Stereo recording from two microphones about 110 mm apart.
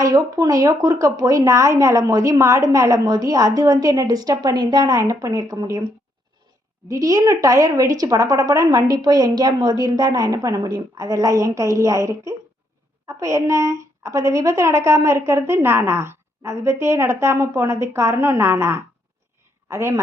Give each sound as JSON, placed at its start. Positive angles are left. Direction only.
{"t": 0.0, "sound": "speech", "side_deg": -35}
{"t": 6.8, "sound": "a woman's voice", "side_deg": -30}